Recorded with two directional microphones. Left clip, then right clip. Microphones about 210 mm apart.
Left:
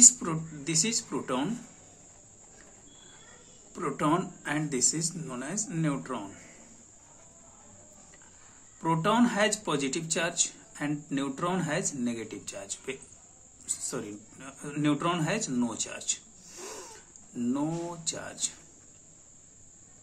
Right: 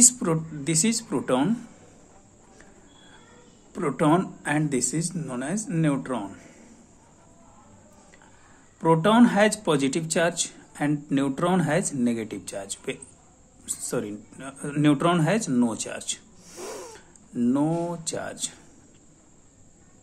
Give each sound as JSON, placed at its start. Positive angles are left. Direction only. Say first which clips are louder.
{"t": 0.0, "sound": "speech", "louder": "right 1 dB", "side_deg": -35}
{"t": 3.7, "sound": "speech", "louder": "right 6 dB", "side_deg": -35}
{"t": 8.8, "sound": "speech", "louder": "right 7 dB", "side_deg": -35}